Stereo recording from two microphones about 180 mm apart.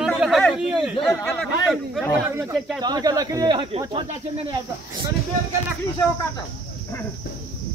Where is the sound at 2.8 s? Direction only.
20° right (ahead or behind).